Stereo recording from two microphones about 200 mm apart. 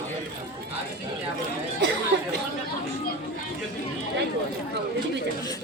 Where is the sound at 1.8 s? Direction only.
60° right (ahead or behind).